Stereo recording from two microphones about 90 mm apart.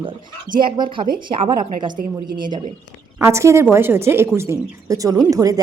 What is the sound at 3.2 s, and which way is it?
A woman's voice, 30° right (ahead or behind).